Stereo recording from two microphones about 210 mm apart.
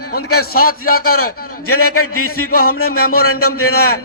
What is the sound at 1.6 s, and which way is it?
A man's voice, 90° left.